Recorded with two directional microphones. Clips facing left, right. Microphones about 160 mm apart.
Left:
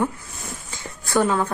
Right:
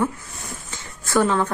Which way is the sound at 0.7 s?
15° left (ahead or behind).